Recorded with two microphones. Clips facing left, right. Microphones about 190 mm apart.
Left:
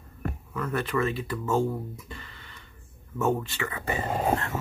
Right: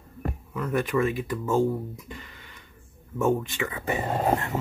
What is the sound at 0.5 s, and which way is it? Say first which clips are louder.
Speech: right 3 dB; 15° right (ahead or behind).